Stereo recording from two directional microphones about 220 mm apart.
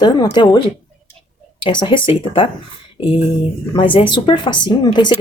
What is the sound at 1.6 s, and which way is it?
Speech, 20° left (ahead or behind).